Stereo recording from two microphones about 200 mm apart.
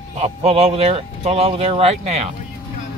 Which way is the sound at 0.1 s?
30° right (ahead or behind).